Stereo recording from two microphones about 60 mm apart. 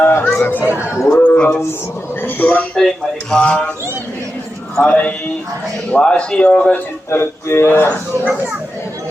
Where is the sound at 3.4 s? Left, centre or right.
Left.